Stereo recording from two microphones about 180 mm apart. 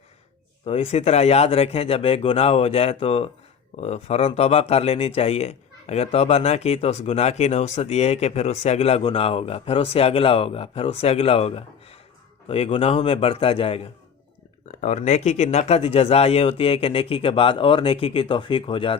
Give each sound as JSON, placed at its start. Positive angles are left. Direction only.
{"t": 0.6, "sound": "speech", "side_deg": 35}